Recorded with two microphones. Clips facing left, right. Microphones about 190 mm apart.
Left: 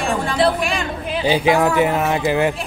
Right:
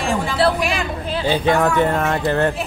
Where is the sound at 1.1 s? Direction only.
15° left (ahead or behind).